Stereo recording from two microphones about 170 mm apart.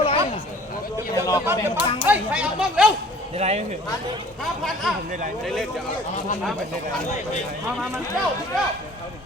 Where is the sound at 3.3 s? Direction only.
40° right (ahead or behind).